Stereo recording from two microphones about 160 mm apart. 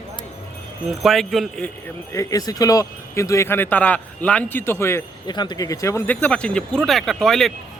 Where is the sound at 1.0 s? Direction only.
Centre (ahead or behind).